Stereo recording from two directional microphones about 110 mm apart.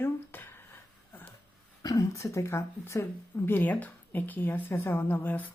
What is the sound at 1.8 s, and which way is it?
Speech, 30° left (ahead or behind).